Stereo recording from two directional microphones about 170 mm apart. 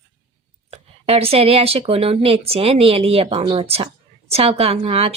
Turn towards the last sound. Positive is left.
turn(degrees=-35)  # may be behind; listen again after turning